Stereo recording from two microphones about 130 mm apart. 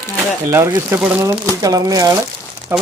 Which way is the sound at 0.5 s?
20° right (ahead or behind).